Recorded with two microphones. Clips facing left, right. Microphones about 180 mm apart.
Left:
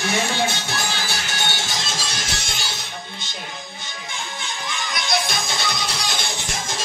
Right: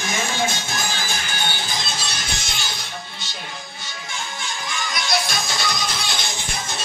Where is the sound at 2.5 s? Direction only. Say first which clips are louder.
Even; 25° left (ahead or behind).